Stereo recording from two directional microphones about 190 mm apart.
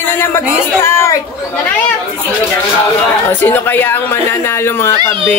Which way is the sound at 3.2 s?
10° left (ahead or behind).